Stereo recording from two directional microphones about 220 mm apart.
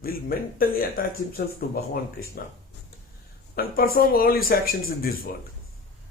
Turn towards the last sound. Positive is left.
turn(degrees=40)  # may be behind; listen again after turning